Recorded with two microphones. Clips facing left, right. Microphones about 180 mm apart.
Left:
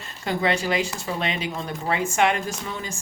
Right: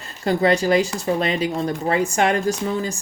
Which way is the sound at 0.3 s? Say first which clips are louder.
Right 6 dB; 40° right (ahead or behind).